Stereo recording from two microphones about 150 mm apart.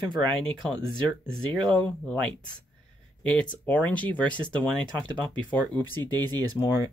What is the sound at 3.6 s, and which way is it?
Speech, 10° left (ahead or behind).